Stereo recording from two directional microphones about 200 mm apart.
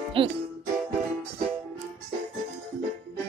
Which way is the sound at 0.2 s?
25° right (ahead or behind).